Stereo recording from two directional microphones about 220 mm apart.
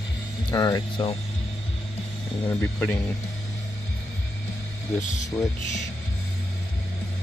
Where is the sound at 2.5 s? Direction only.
5° left (ahead or behind).